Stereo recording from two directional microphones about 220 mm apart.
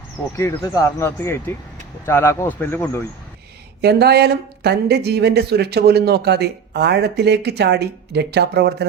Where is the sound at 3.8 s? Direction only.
50° right (ahead or behind).